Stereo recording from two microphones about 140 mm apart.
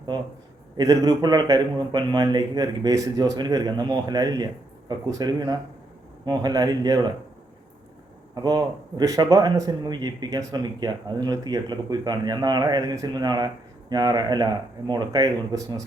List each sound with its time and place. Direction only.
0.8 s speech: 25° right (ahead or behind)
8.4 s speech: 25° right (ahead or behind)